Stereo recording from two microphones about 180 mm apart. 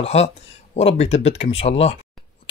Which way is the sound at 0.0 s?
35° left (ahead or behind).